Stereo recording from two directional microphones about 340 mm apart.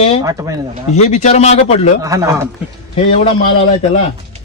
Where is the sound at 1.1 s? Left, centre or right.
Centre.